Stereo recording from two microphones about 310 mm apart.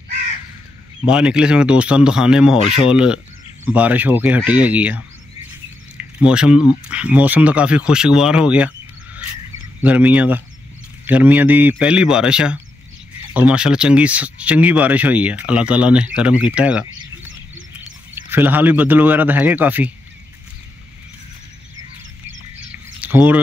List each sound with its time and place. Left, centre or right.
1.0 s speech: centre
2.6 s speech: centre
2.9 s speech: centre
18.3 s speech: centre
22.7 s a sound: centre